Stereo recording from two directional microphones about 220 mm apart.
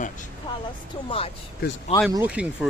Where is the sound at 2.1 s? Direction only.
5° right (ahead or behind).